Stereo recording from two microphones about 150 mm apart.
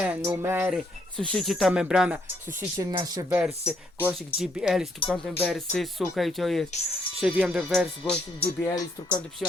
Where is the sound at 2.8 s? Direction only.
25° right (ahead or behind).